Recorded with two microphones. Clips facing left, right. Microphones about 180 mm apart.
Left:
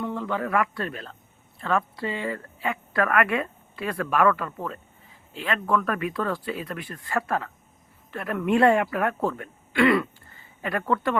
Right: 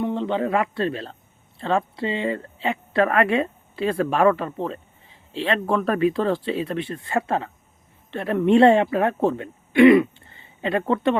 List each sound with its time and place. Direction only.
0.0 s speech: 20° right (ahead or behind)